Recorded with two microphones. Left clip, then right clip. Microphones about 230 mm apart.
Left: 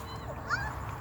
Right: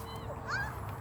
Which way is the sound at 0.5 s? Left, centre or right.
Right.